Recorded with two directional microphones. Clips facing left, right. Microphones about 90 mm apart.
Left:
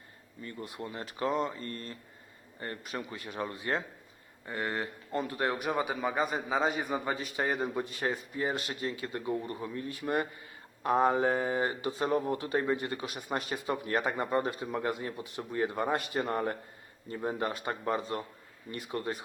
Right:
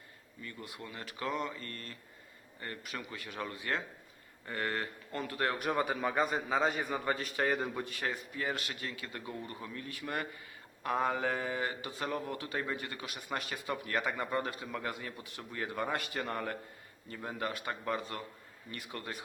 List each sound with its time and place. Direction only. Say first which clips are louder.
0.4 s a man's voice: left 5 dB; 30° left (ahead or behind)
4.4 s speech: left 2 dB; 15° left (ahead or behind)
5.6 s a man's voice: left 1 dB; 5° left (ahead or behind); by 19.2 s 30° left (ahead or behind)